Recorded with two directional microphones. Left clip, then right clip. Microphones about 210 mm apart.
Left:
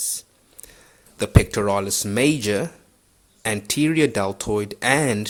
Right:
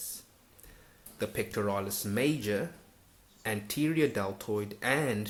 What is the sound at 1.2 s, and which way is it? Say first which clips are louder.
Speech: left 11 dB; 45° left (ahead or behind).